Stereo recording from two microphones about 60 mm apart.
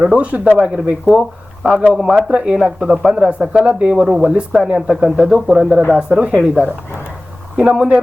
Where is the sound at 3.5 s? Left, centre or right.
Centre.